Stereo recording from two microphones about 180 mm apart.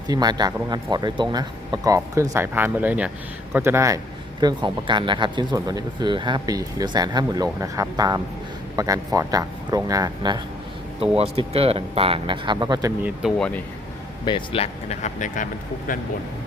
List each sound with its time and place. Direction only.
0.1 s a man's voice: 20° right (ahead or behind)
11.2 s a man's voice: 30° right (ahead or behind)
13.0 s speech: 5° right (ahead or behind)
14.3 s speech: 30° left (ahead or behind); by 16.0 s 50° left (ahead or behind)